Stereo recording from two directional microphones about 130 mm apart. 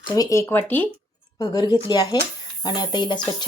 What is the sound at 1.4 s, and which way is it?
A woman's voice, 30° left (ahead or behind).